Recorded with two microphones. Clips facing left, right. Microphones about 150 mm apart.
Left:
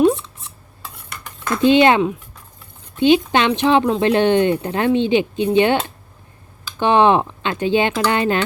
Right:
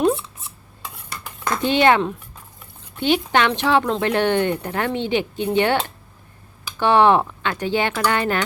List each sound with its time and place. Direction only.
1.6 s speech: 20° left (ahead or behind)
3.0 s speech: 20° left (ahead or behind)
6.7 s speech: 20° left (ahead or behind)